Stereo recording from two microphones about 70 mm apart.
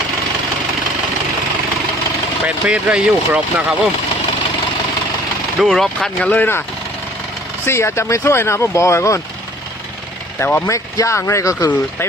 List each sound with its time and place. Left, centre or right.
2.5 s speech: centre
5.5 s speech: centre
6.3 s speech: left
7.6 s speech: left
10.4 s speech: left
10.9 s speech: left